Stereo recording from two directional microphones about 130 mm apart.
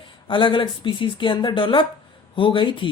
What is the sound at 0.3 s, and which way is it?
A woman's voice, 40° left (ahead or behind).